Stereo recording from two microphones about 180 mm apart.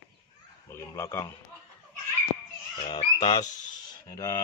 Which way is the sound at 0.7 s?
15° left (ahead or behind).